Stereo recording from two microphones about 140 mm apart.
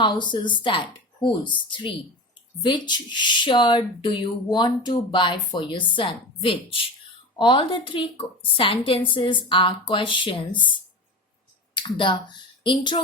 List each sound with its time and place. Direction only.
0.0 s speech: 35° left (ahead or behind)
2.6 s speech: 35° left (ahead or behind)